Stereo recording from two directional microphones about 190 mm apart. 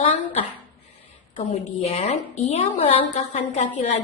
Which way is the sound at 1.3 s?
35° left (ahead or behind).